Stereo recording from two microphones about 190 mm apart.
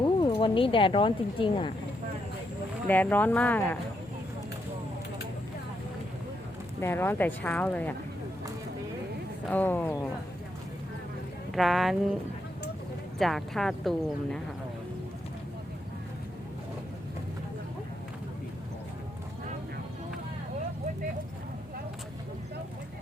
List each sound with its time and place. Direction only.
0.0 s speech: 25° left (ahead or behind)
2.8 s speech: 10° left (ahead or behind)
6.7 s speech: 10° left (ahead or behind)
9.5 s speech: 10° left (ahead or behind)
11.5 s speech: centre (ahead or behind)
13.1 s speech: centre (ahead or behind)